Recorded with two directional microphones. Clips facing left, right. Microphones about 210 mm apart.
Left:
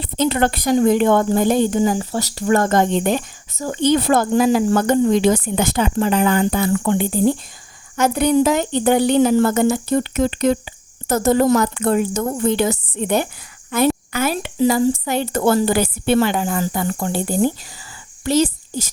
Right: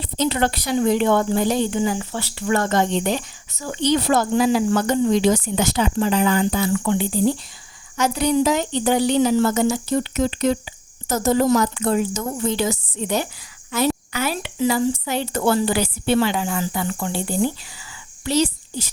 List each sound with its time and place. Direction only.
0.0 s a woman's voice: 55° left (ahead or behind)